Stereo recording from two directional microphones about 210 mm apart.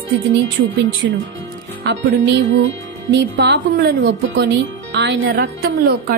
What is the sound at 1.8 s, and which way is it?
Speech, 55° right (ahead or behind).